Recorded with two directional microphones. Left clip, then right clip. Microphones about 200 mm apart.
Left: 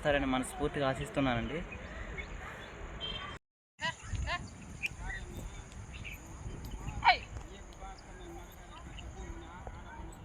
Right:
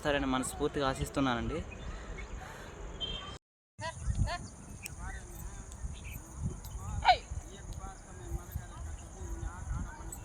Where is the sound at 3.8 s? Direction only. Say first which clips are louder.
Left 3 dB; 60° right (ahead or behind).